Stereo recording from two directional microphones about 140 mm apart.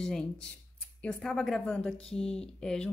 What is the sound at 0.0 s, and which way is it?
A woman's voice, 5° left (ahead or behind).